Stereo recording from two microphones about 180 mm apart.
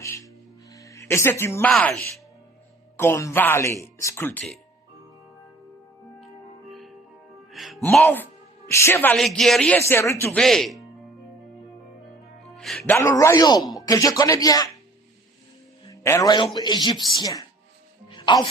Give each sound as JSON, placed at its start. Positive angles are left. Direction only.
{"t": 0.0, "sound": "music", "side_deg": 15}
{"t": 1.7, "sound": "speech", "side_deg": 5}
{"t": 3.0, "sound": "speech", "side_deg": 15}
{"t": 6.1, "sound": "music", "side_deg": 0}
{"t": 7.9, "sound": "speech", "side_deg": 10}
{"t": 10.3, "sound": "speech", "side_deg": 0}
{"t": 12.5, "sound": "a man's voice", "side_deg": 5}
{"t": 15.9, "sound": "a man's voice", "side_deg": 15}